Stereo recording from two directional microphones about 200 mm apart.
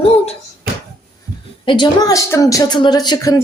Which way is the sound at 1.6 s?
20° left (ahead or behind).